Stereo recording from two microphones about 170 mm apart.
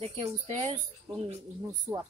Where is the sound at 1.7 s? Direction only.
20° right (ahead or behind).